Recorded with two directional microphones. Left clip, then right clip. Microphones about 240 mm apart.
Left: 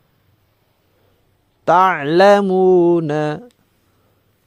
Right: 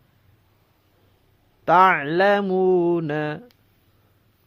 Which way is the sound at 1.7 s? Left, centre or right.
Left.